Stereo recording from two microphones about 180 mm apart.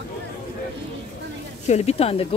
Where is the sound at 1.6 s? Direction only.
35° left (ahead or behind).